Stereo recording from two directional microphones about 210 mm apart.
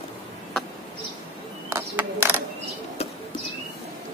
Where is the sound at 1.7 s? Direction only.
10° right (ahead or behind).